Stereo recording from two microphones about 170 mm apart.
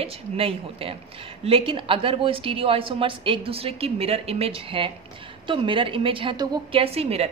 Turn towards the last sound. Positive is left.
turn(degrees=-35)  # may be behind; listen again after turning